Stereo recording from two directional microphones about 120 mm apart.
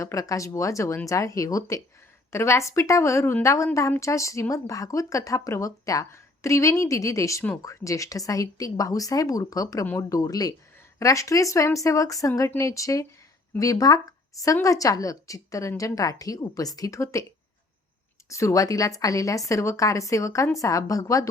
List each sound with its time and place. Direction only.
0.0 s a woman's voice: 30° left (ahead or behind)
18.3 s a woman's voice: 25° left (ahead or behind)